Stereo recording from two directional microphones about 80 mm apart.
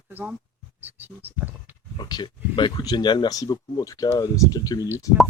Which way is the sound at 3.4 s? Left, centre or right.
Left.